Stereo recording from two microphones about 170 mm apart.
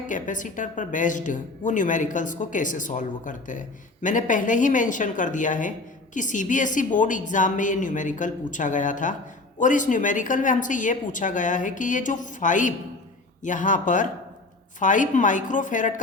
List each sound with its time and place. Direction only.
0.1 s a woman's voice: 50° left (ahead or behind)